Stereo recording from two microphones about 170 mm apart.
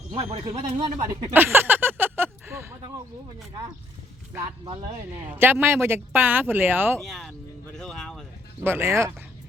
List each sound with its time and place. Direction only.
0.1 s speech: 35° right (ahead or behind)
1.3 s a sound: 10° right (ahead or behind)
5.4 s speech: 10° right (ahead or behind)
7.0 s speech: centre (ahead or behind)
8.6 s speech: 15° right (ahead or behind)